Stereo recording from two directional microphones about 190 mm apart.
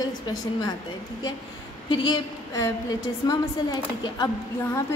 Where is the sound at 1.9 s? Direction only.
25° left (ahead or behind).